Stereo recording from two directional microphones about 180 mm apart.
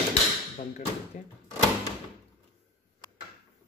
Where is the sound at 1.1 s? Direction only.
45° left (ahead or behind).